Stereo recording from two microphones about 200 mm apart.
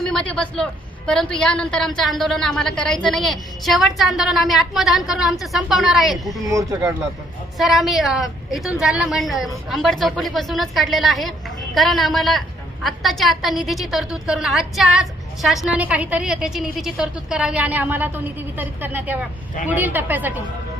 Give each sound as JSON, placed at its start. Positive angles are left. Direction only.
{"t": 0.0, "sound": "a woman's voice", "side_deg": 5}
{"t": 6.4, "sound": "a woman's voice", "side_deg": -15}
{"t": 7.6, "sound": "a woman's voice", "side_deg": 0}